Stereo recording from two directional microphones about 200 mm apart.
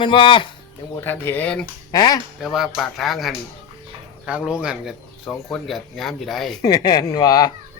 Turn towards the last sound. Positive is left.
turn(degrees=20)  # may be behind; listen again after turning